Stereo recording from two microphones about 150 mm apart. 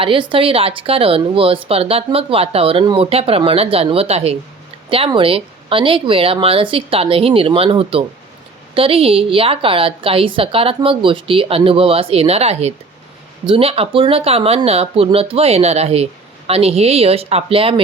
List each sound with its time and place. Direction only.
0.0 s speech: 35° right (ahead or behind)